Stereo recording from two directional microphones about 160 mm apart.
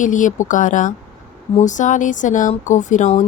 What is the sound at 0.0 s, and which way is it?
Speech, 50° left (ahead or behind).